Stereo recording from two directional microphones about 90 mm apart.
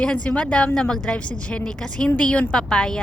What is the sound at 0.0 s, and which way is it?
A woman's voice, 10° left (ahead or behind).